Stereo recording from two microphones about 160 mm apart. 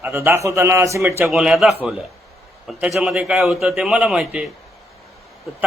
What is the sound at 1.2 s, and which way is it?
Speech, centre (ahead or behind).